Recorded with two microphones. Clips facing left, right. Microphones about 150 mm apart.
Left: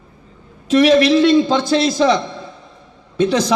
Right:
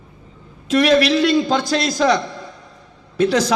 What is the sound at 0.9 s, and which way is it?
A man's voice, 30° left (ahead or behind).